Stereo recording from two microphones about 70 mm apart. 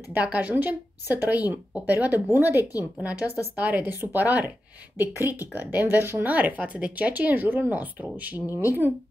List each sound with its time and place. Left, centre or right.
0.1 s speech: right